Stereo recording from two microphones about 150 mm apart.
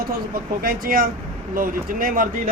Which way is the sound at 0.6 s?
70° right (ahead or behind).